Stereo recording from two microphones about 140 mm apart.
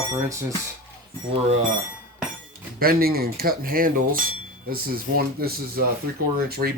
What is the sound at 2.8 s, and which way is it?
Speech, 90° right.